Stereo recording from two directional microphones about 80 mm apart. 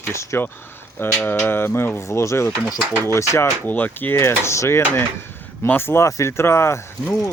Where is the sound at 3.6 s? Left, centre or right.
Left.